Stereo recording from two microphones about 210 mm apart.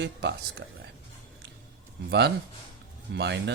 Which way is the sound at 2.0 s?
55° right (ahead or behind).